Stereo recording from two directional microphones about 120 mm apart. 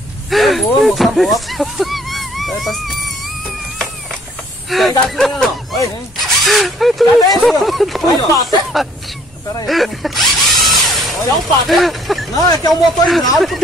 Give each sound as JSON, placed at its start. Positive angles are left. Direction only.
{"t": 0.3, "sound": "speech", "side_deg": 0}
{"t": 4.6, "sound": "speech", "side_deg": 0}
{"t": 8.2, "sound": "speech", "side_deg": 30}
{"t": 9.7, "sound": "drill", "side_deg": 0}
{"t": 11.6, "sound": "a sound", "side_deg": 0}
{"t": 12.4, "sound": "speech", "side_deg": 30}
{"t": 13.0, "sound": "speech", "side_deg": 0}